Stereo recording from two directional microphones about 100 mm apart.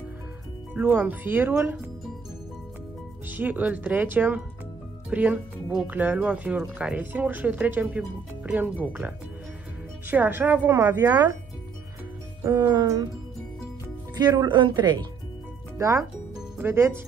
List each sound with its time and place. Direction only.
0.7 s speech: 20° right (ahead or behind)
3.3 s speech: 15° right (ahead or behind)
10.0 s speech: 20° right (ahead or behind)
12.5 s speech: 40° right (ahead or behind)
14.1 s speech: 40° right (ahead or behind)
15.8 s speech: 30° right (ahead or behind)